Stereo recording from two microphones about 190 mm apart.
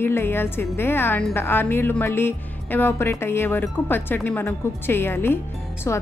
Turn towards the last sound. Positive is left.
turn(degrees=10)  # may be behind; listen again after turning